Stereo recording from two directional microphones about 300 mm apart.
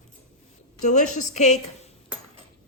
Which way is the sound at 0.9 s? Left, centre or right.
Left.